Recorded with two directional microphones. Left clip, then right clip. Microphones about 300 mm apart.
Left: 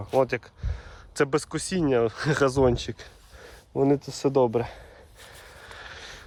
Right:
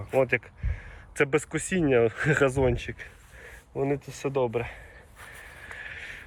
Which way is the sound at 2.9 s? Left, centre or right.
Left.